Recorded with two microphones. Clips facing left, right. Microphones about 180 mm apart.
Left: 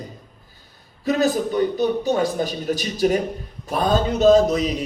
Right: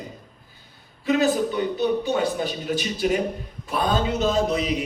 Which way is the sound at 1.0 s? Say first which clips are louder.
Left 1 dB; 40° left (ahead or behind).